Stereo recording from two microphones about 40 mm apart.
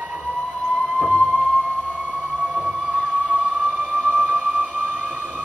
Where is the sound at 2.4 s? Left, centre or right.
Right.